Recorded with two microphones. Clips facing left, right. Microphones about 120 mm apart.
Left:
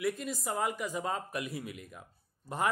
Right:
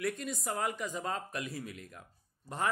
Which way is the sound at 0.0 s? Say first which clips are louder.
Left 2 dB; centre (ahead or behind).